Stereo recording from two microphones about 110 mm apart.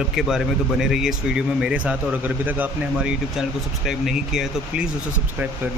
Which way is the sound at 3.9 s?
Centre (ahead or behind).